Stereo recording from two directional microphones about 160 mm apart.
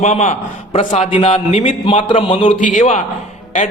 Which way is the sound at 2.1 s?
30° left (ahead or behind).